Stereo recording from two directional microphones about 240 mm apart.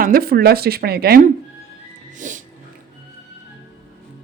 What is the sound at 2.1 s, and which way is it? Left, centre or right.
Music, right.